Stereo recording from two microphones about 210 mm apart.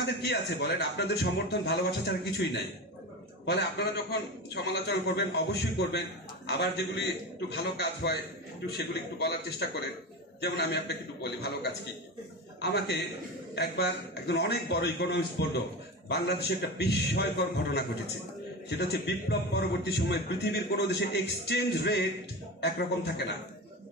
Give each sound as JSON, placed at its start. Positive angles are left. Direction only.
{"t": 0.0, "sound": "a man's voice", "side_deg": 55}
{"t": 3.4, "sound": "a man's voice", "side_deg": 50}